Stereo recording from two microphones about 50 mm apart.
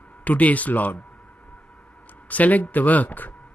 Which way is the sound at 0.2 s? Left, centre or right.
Left.